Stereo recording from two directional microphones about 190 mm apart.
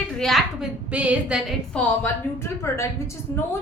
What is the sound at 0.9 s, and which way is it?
Speech, 5° right (ahead or behind).